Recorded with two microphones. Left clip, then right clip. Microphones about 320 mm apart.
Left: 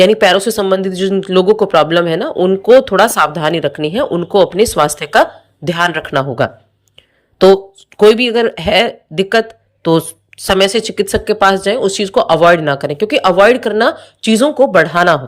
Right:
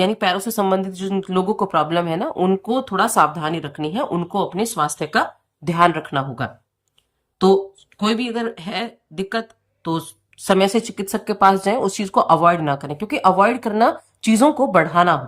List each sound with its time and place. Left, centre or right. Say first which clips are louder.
0.0 s speech: left 11 dB; centre